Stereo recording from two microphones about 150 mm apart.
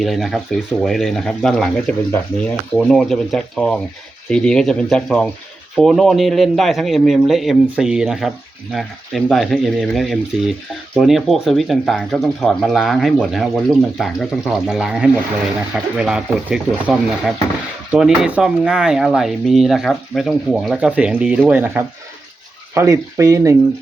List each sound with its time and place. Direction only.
0.0 s speech: centre (ahead or behind); by 23.6 s 20° right (ahead or behind)